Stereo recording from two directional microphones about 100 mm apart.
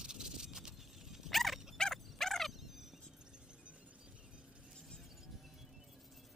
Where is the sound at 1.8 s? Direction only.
5° left (ahead or behind).